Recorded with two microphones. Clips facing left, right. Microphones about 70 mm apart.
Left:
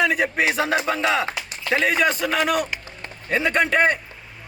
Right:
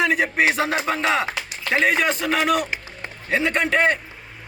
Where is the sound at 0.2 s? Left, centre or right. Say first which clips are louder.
Right 1 dB; right.